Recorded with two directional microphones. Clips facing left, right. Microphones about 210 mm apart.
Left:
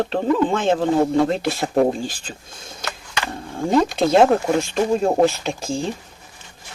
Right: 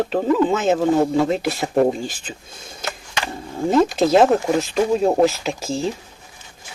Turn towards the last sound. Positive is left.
turn(degrees=0)  # may be behind; listen again after turning